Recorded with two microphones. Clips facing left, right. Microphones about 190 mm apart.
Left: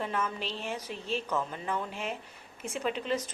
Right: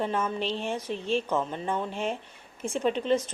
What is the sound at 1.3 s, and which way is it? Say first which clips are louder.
Speech: right 4 dB; 25° right (ahead or behind).